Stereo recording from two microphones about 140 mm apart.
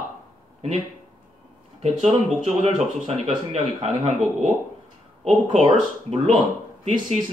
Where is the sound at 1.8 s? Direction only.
55° right (ahead or behind).